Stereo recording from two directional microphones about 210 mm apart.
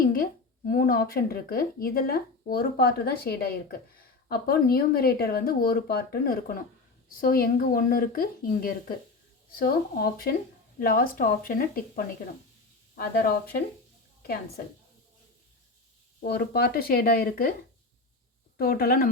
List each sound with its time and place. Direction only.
0.0 s a woman's voice: 45° left (ahead or behind)
16.2 s speech: 50° left (ahead or behind)
18.5 s speech: 45° left (ahead or behind)